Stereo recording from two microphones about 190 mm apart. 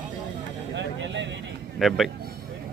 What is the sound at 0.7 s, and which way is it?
Vehicle, 70° right (ahead or behind).